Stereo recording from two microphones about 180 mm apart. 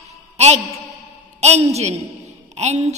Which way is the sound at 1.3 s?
35° right (ahead or behind).